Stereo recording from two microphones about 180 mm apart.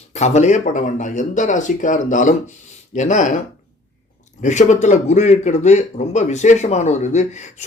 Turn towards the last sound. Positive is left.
turn(degrees=40)  # may be behind; listen again after turning